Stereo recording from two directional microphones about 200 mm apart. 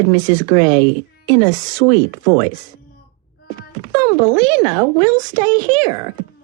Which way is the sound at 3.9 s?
20° right (ahead or behind).